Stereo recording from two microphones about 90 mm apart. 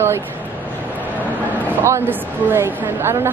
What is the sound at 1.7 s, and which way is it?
Speech, 25° right (ahead or behind).